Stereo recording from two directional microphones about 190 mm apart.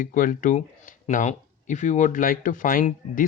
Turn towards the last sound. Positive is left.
turn(degrees=45)  # may be behind; listen again after turning